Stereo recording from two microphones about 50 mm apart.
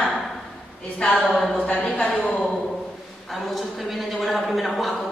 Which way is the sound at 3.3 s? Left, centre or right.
Centre.